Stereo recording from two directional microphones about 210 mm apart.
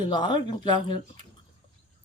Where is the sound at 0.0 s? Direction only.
20° left (ahead or behind).